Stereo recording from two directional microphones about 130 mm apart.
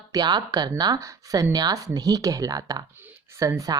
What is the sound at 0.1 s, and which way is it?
Speech, 30° right (ahead or behind).